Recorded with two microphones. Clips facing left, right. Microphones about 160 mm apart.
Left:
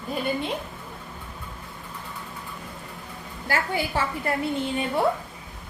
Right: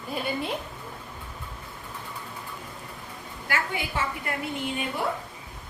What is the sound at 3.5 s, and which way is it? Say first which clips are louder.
A woman's voice: left 4 dB; 35° left (ahead or behind).